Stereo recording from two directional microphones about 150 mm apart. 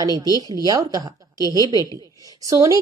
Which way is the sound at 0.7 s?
25° right (ahead or behind).